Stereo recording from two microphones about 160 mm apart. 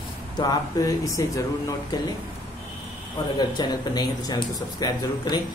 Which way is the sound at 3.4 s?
25° left (ahead or behind).